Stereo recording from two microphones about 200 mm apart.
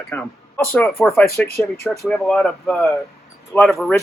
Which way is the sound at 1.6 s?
15° left (ahead or behind).